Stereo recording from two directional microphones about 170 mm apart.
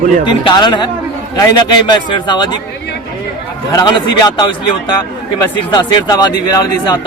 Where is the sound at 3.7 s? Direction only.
25° left (ahead or behind).